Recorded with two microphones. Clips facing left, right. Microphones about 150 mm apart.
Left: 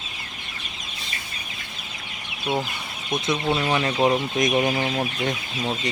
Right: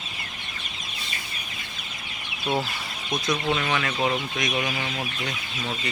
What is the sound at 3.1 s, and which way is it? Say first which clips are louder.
Speech: left 2 dB; 25° left (ahead or behind).